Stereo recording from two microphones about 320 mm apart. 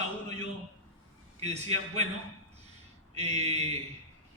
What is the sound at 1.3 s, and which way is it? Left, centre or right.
Speech, centre.